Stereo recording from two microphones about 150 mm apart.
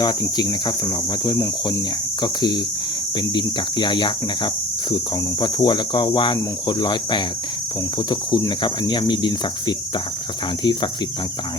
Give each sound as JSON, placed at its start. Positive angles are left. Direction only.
{"t": 0.0, "sound": "speech", "side_deg": 25}